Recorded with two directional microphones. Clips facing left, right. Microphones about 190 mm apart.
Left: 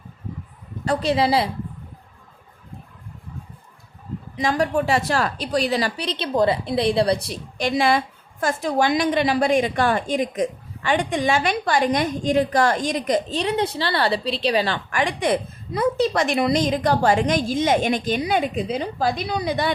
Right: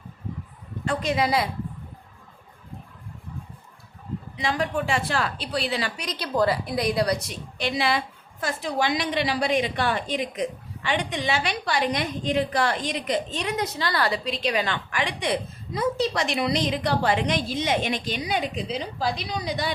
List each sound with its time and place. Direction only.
0.9 s a woman's voice: 30° left (ahead or behind)
4.4 s a woman's voice: 45° left (ahead or behind)
7.6 s a woman's voice: 45° left (ahead or behind)
14.8 s a woman's voice: 45° left (ahead or behind)